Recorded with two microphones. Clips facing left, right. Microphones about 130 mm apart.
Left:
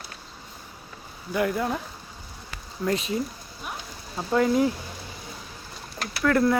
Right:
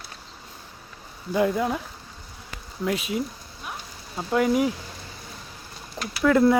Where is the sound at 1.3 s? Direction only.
20° right (ahead or behind).